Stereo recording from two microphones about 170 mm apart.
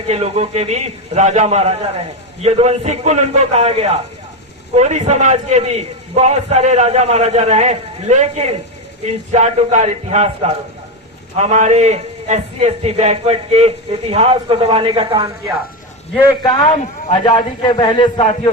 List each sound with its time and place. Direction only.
0.1 s a man's voice: 35° right (ahead or behind)
17.2 s a man's voice: 25° left (ahead or behind)